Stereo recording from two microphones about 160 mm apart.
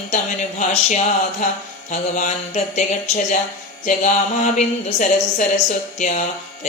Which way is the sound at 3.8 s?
50° left (ahead or behind).